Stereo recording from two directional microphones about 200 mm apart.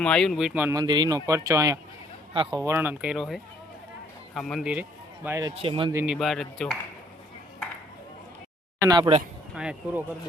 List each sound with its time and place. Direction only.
0.0 s speech: 5° left (ahead or behind); by 5.9 s 25° right (ahead or behind)
5.9 s speech: 10° right (ahead or behind)
6.1 s speech: centre (ahead or behind)
8.8 s speech: 20° right (ahead or behind)
9.6 s speech: 5° right (ahead or behind)